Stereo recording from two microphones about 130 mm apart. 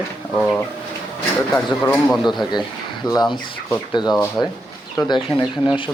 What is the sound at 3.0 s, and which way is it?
Speech, 30° left (ahead or behind).